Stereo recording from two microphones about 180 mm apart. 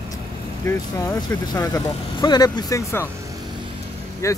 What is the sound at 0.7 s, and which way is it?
Speech, 15° left (ahead or behind).